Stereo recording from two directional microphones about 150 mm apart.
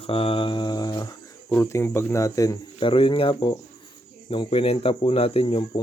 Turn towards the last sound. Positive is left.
turn(degrees=35)  # may be behind; listen again after turning